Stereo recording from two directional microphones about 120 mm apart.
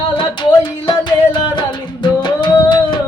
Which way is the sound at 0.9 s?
40° left (ahead or behind).